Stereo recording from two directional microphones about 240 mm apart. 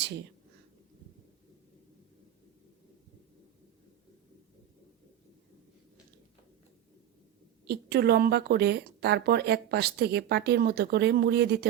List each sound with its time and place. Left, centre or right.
7.7 s speech: right